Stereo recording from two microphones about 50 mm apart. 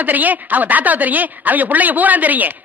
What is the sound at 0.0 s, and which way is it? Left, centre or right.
A woman's voice, right.